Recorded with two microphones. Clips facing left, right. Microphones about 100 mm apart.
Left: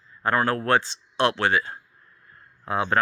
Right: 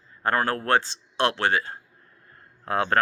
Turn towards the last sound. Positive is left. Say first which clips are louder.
# even
turn(degrees=-50)  # may be behind; listen again after turning